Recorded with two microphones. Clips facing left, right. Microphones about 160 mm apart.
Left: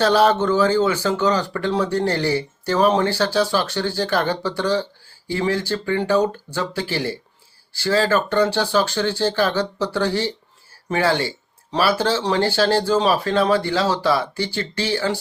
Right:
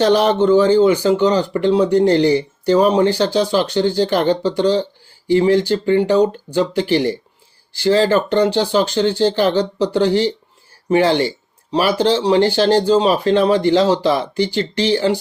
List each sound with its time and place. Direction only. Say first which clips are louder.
0.0 s speech: right 3 dB; 15° right (ahead or behind)